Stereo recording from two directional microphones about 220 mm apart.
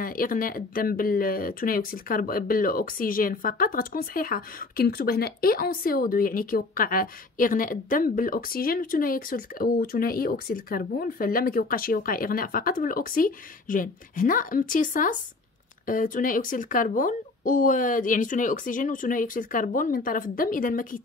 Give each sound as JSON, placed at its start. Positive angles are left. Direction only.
{"t": 0.0, "sound": "speech", "side_deg": 40}